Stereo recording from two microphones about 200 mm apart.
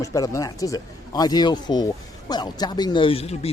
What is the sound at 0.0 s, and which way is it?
Speech, 15° left (ahead or behind).